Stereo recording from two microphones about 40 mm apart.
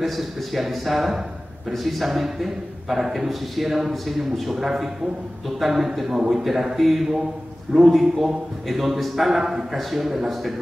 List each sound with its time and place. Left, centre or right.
0.0 s a man's voice: centre